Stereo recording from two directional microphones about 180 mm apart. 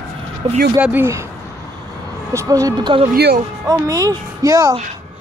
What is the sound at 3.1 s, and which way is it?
Speech, 60° right (ahead or behind).